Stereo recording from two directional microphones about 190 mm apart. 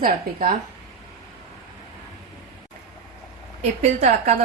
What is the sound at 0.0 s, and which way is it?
Speech, 45° right (ahead or behind).